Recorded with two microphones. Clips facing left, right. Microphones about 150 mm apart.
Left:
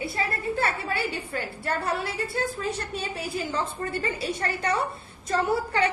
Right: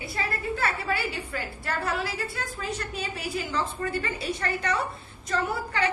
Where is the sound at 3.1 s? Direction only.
30° left (ahead or behind).